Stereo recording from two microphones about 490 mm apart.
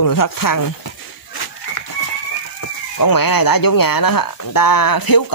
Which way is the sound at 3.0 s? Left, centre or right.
Left.